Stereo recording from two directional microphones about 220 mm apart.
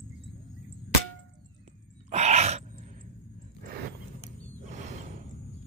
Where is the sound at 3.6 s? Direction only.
45° right (ahead or behind).